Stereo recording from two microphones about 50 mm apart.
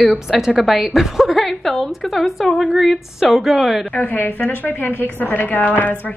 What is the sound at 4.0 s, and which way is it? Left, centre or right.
A woman's voice, left.